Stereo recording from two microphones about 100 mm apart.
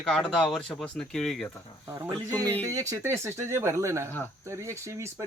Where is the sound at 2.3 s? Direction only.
20° left (ahead or behind).